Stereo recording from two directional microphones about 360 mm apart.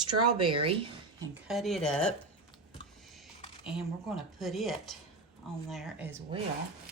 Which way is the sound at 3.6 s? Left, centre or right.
Centre.